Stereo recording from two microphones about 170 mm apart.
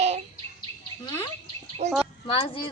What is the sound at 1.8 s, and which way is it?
Speech, 40° right (ahead or behind).